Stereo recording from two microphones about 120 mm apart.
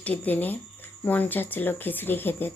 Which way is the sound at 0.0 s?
15° left (ahead or behind).